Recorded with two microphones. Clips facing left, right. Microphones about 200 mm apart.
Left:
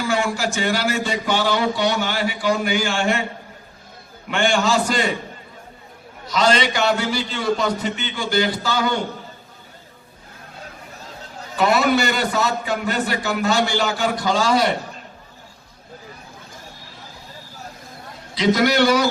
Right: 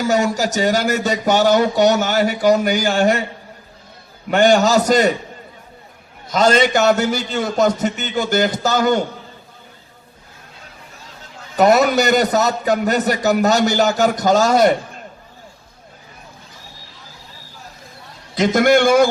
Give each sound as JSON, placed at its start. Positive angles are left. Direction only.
{"t": 0.0, "sound": "a man's voice", "side_deg": -40}
{"t": 4.3, "sound": "a man's voice", "side_deg": -40}
{"t": 6.2, "sound": "a man's voice", "side_deg": -45}
{"t": 11.5, "sound": "a man's voice", "side_deg": -40}
{"t": 18.3, "sound": "a man's voice", "side_deg": -50}